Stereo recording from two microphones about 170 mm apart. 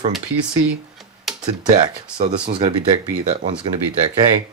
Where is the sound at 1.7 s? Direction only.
30° right (ahead or behind).